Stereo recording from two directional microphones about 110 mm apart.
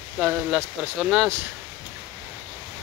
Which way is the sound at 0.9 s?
5° right (ahead or behind).